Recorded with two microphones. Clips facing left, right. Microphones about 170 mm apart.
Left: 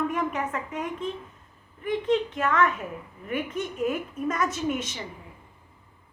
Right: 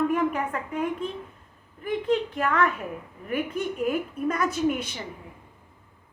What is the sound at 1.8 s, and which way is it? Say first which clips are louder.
A woman's voice: even; 35° right (ahead or behind).